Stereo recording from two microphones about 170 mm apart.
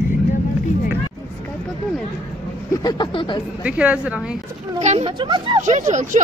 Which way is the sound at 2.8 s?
25° left (ahead or behind).